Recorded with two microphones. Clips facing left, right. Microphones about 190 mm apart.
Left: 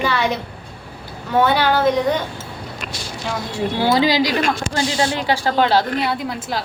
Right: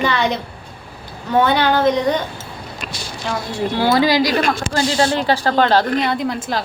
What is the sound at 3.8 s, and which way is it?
Speech, 15° left (ahead or behind).